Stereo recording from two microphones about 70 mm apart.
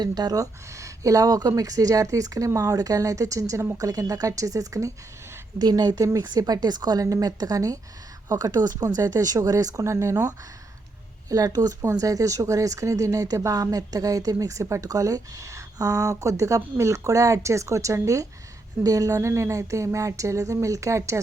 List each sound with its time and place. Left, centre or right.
0.0 s a woman's voice: right
0.7 s speech: right
3.8 s speech: right
5.5 s speech: right
6.1 s a woman's voice: right
9.8 s speech: right
11.3 s speech: right
11.8 s speech: right